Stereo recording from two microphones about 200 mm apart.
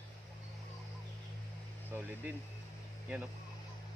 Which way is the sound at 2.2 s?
10° right (ahead or behind).